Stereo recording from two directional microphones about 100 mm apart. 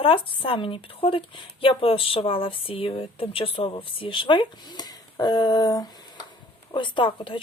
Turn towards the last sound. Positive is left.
turn(degrees=55)  # may be behind; listen again after turning